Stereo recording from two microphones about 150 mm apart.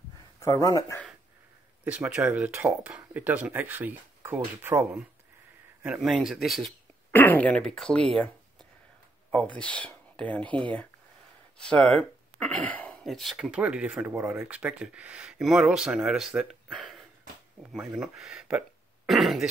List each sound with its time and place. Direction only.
0.4 s speech: 25° left (ahead or behind)
1.9 s speech: 10° right (ahead or behind)
5.8 s speech: 5° right (ahead or behind)
7.1 s speech: 10° left (ahead or behind)
9.3 s speech: 5° left (ahead or behind)